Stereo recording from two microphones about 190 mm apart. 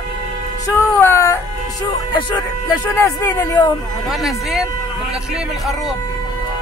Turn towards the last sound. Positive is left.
turn(degrees=0)  # may be behind; listen again after turning